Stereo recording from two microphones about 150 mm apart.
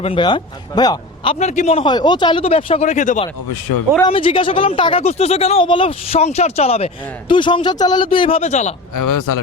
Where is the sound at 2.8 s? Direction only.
55° left (ahead or behind).